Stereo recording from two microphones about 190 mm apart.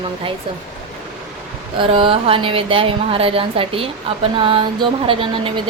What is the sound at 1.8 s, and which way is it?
A woman's voice, 25° right (ahead or behind).